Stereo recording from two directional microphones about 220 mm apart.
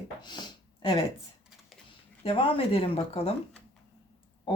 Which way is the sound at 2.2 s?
25° left (ahead or behind).